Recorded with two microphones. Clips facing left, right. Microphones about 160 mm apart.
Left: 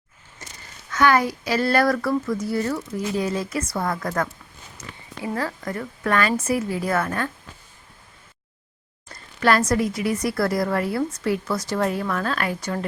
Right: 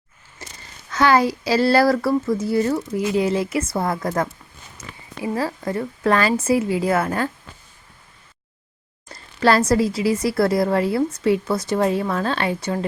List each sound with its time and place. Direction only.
0.9 s a child's voice: 25° right (ahead or behind)
5.4 s a woman's voice: 25° right (ahead or behind)
9.4 s a woman's voice: 30° right (ahead or behind)